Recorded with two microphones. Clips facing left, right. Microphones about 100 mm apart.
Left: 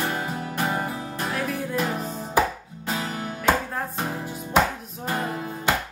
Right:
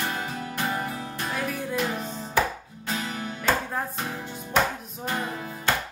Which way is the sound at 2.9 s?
30° left (ahead or behind).